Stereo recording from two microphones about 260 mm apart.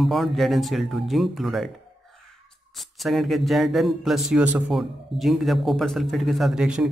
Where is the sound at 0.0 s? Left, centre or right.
Centre.